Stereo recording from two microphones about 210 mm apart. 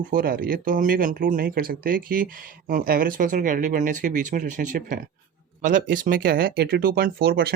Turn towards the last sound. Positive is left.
turn(degrees=-45)  # may be behind; listen again after turning